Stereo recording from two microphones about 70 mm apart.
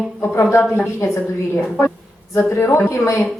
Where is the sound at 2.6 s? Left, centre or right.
Left.